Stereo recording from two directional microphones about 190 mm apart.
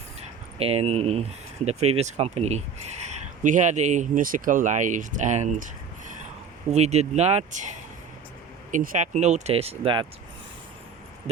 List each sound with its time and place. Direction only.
0.6 s speech: 35° right (ahead or behind)